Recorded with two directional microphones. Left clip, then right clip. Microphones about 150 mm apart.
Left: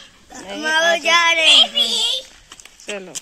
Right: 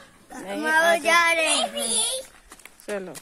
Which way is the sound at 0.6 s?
40° left (ahead or behind).